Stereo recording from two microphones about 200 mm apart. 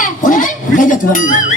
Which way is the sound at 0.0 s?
40° left (ahead or behind).